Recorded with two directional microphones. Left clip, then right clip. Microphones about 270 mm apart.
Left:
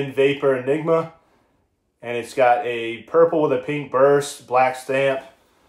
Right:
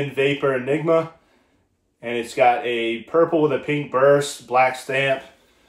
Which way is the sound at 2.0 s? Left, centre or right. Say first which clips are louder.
Even; centre.